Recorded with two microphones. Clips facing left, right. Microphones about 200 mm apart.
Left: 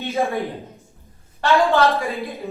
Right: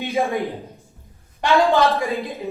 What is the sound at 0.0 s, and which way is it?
A woman's voice, 15° right (ahead or behind).